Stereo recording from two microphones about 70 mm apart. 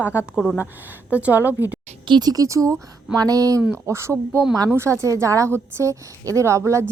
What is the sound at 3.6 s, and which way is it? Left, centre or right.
Speech, right.